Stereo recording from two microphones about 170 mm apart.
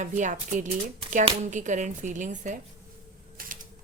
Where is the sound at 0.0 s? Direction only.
45° right (ahead or behind).